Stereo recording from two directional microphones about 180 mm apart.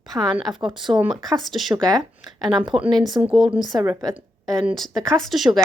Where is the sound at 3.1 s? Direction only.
Centre (ahead or behind).